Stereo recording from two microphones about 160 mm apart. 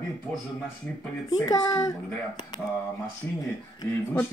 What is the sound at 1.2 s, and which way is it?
Speech, 20° left (ahead or behind).